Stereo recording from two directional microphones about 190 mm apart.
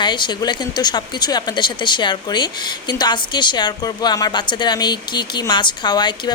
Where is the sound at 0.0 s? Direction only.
25° left (ahead or behind).